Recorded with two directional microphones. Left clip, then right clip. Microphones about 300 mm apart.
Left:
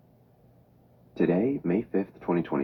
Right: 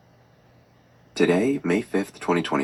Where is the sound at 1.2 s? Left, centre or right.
Right.